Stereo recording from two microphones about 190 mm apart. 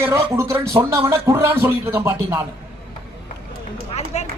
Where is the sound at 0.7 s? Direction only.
25° right (ahead or behind).